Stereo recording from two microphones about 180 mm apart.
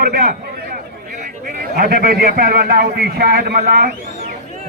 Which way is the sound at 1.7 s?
55° right (ahead or behind).